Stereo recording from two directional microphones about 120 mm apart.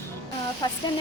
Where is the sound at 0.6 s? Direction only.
35° left (ahead or behind).